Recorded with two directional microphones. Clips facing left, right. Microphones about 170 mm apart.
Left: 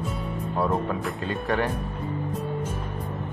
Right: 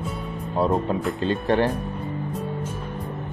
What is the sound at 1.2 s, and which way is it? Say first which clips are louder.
Speech: right 5 dB; 30° right (ahead or behind).